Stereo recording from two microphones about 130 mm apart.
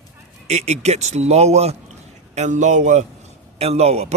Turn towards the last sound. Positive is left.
turn(degrees=-55)  # may be behind; listen again after turning